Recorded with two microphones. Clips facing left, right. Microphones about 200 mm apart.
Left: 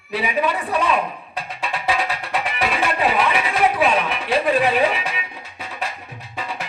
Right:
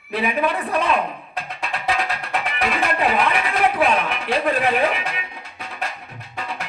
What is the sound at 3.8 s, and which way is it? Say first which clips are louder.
Speech: even; 55° right (ahead or behind).